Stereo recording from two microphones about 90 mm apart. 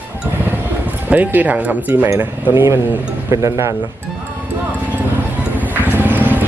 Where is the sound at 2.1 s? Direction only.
20° right (ahead or behind).